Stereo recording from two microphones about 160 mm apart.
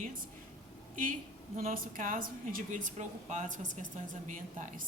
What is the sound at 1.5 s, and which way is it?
A woman's voice, 60° right (ahead or behind).